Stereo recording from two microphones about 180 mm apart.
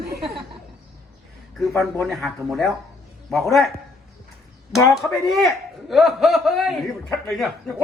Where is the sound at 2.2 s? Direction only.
Centre (ahead or behind).